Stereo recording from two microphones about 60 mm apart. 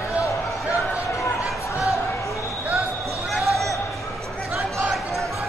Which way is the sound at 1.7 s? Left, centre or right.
Left.